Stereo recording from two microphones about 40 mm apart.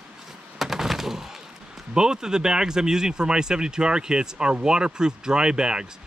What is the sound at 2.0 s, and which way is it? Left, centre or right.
Speech, centre.